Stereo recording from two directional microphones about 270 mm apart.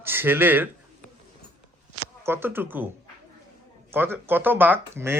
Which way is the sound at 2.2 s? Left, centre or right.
Centre.